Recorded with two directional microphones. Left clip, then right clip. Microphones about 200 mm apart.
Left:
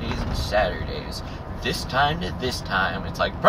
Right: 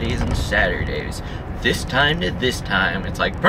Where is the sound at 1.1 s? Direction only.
15° right (ahead or behind).